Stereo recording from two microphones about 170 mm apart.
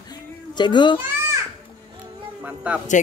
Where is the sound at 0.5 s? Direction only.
25° left (ahead or behind).